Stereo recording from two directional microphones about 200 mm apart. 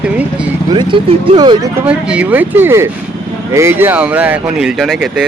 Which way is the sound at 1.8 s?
5° right (ahead or behind).